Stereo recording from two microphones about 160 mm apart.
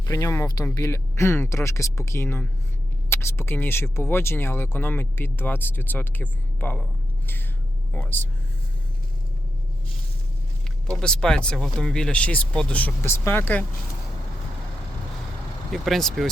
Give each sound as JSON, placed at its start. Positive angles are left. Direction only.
{"t": 0.0, "sound": "speech", "side_deg": 20}
{"t": 7.9, "sound": "speech", "side_deg": 15}
{"t": 10.8, "sound": "speech", "side_deg": 5}
{"t": 15.7, "sound": "speech", "side_deg": 0}